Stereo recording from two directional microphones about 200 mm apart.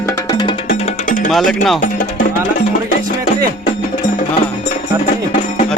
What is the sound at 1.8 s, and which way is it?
Music, 40° left (ahead or behind).